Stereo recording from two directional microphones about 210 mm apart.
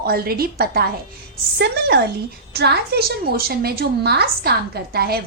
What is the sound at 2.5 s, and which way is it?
A woman's voice, 50° right (ahead or behind).